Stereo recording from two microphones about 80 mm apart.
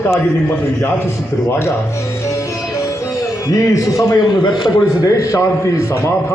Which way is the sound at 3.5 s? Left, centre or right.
Left.